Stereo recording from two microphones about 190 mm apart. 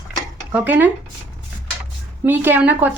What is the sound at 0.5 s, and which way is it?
Speech, 10° right (ahead or behind).